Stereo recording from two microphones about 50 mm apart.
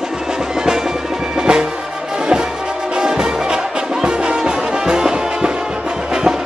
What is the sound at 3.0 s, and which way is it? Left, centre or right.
Music, centre.